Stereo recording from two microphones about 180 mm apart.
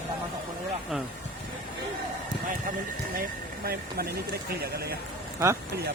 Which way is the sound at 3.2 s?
55° right (ahead or behind).